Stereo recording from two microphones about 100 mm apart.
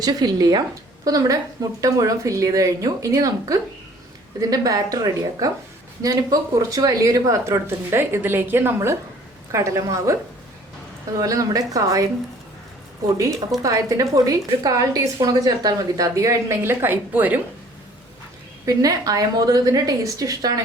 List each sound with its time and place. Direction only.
0.0 s a woman's voice: 40° right (ahead or behind)
11.2 s a woman's voice: 35° right (ahead or behind)
13.6 s a woman's voice: 35° right (ahead or behind); by 17.4 s 20° right (ahead or behind)
18.6 s a woman's voice: 35° right (ahead or behind)